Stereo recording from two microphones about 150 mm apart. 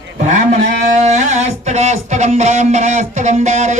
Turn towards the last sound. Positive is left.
turn(degrees=-50)  # may be behind; listen again after turning